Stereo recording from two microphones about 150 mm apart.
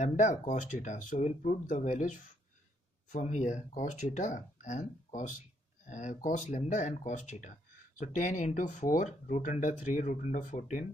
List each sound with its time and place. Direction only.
0.0 s speech: 55° left (ahead or behind)